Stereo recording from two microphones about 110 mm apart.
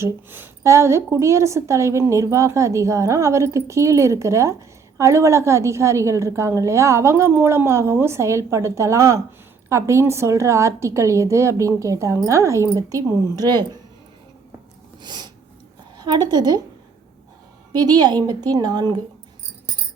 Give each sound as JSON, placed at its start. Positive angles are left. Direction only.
{"t": 0.0, "sound": "a woman's voice", "side_deg": -20}
{"t": 15.0, "sound": "sneeze", "side_deg": -40}
{"t": 16.0, "sound": "a woman's voice", "side_deg": -40}
{"t": 17.7, "sound": "a woman's voice", "side_deg": -40}